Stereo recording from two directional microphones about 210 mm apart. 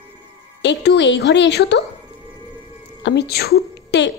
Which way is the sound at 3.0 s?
50° left (ahead or behind).